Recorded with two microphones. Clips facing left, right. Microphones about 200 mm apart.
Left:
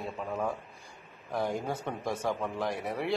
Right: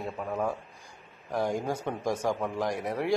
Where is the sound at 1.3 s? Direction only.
15° right (ahead or behind).